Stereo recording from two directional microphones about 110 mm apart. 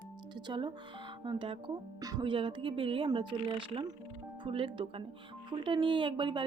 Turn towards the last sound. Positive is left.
turn(degrees=-45)  # may be behind; listen again after turning